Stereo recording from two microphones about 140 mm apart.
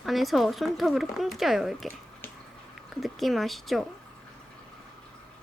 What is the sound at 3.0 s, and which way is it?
Speech, centre (ahead or behind).